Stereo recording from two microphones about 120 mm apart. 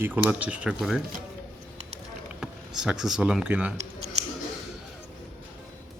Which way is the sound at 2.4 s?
5° right (ahead or behind).